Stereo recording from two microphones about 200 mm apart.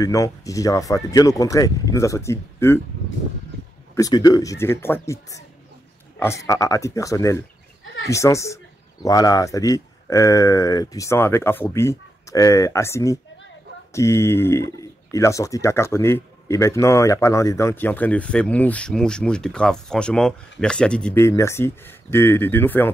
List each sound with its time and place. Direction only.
0.0 s speech: 15° left (ahead or behind)
3.9 s speech: 20° left (ahead or behind)